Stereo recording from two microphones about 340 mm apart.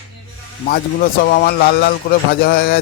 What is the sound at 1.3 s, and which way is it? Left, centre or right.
Music, left.